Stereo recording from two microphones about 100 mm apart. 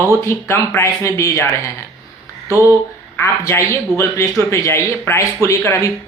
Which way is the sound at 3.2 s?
25° left (ahead or behind).